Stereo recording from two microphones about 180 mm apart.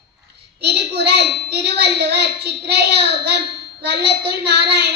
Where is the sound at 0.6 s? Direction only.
65° right (ahead or behind).